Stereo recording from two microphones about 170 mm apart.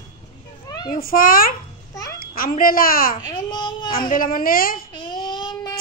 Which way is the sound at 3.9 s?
55° left (ahead or behind).